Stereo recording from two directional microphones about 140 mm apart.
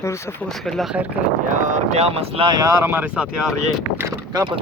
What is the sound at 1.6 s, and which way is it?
Speech, 55° right (ahead or behind).